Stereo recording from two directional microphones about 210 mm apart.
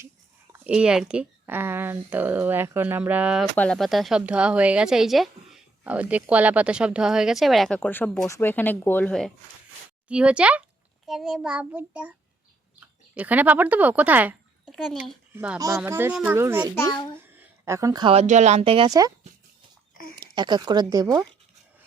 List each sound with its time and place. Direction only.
0.5 s speech: 5° right (ahead or behind)
3.5 s a child's voice: 5° left (ahead or behind)
15.5 s speech: 15° right (ahead or behind)
16.7 s a child's voice: 15° left (ahead or behind)
17.3 s speech: 15° right (ahead or behind)
20.1 s speech: 20° right (ahead or behind)